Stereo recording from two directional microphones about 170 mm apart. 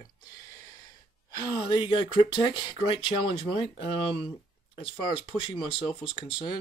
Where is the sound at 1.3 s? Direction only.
25° left (ahead or behind).